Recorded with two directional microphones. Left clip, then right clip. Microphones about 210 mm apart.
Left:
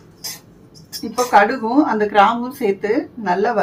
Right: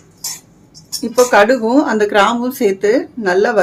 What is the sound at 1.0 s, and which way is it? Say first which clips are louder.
Speech: right 4 dB; 55° right (ahead or behind).